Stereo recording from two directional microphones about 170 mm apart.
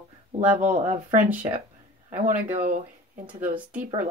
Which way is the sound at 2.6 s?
50° right (ahead or behind).